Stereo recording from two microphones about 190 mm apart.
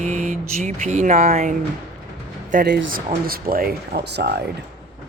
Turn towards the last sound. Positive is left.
turn(degrees=-60)  # may be behind; listen again after turning